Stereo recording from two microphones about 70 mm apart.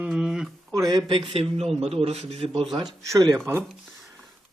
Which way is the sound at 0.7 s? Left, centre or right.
Right.